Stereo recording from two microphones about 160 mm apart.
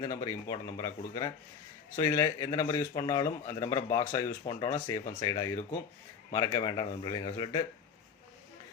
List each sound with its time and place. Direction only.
0.0 s speech: 20° left (ahead or behind)